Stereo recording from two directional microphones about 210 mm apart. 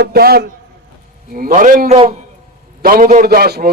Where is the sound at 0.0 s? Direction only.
50° right (ahead or behind).